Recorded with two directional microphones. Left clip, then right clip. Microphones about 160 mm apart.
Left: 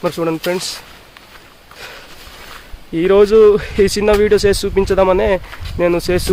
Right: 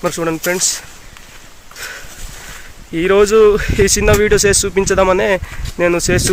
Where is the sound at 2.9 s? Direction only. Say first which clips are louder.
Left 1 dB; 10° left (ahead or behind).